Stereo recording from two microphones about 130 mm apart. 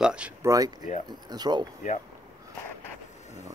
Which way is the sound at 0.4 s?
25° right (ahead or behind).